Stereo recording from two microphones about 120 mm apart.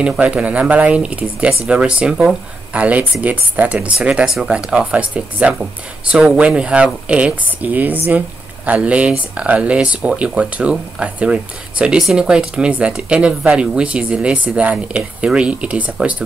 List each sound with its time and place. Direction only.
0.0 s speech: 10° right (ahead or behind)